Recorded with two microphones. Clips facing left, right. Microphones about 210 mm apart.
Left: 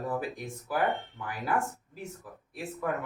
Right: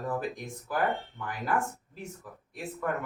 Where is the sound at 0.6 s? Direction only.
15° left (ahead or behind).